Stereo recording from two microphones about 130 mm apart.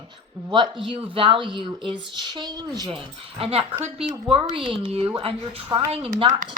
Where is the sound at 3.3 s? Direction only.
50° right (ahead or behind).